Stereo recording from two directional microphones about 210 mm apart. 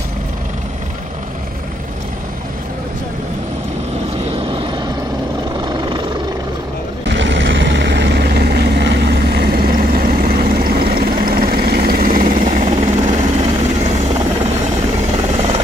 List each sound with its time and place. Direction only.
4.5 s vehicle: 20° right (ahead or behind)
7.1 s vehicle: 60° right (ahead or behind); by 14.0 s 35° right (ahead or behind)
15.3 s helicopter: 30° right (ahead or behind)